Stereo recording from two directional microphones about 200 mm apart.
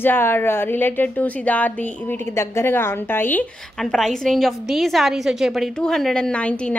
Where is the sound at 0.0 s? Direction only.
10° left (ahead or behind).